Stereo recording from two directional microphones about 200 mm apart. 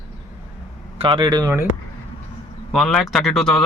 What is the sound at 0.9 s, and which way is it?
Speech, 25° right (ahead or behind).